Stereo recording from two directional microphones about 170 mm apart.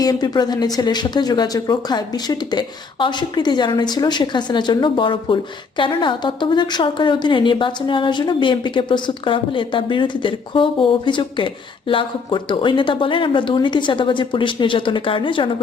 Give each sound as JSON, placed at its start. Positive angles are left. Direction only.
{"t": 0.0, "sound": "speech", "side_deg": 20}